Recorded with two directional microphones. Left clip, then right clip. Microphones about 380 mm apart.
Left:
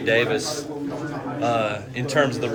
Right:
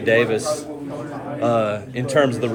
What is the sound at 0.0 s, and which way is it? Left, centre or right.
A man's voice, centre.